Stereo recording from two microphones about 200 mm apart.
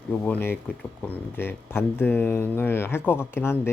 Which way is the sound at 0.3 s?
10° left (ahead or behind).